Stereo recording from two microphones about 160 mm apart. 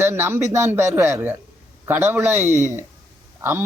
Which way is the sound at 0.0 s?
15° right (ahead or behind).